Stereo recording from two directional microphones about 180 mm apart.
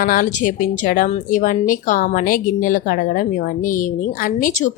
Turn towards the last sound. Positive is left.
turn(degrees=50)  # may be behind; listen again after turning